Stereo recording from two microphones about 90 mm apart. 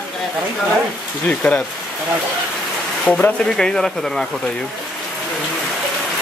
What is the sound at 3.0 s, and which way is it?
Speech, 10° left (ahead or behind).